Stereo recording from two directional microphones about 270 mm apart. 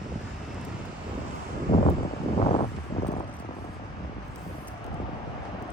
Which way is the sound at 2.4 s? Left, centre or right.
Left.